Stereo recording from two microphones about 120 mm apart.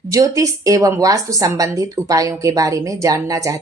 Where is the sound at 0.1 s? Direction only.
25° right (ahead or behind).